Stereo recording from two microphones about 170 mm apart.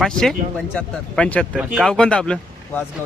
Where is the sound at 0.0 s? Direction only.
Centre (ahead or behind).